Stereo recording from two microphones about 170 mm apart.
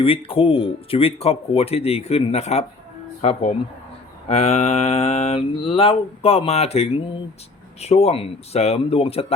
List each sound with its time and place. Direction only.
0.0 s speech: 35° left (ahead or behind)